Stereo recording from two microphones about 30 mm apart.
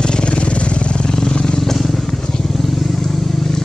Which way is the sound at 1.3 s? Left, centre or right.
Left.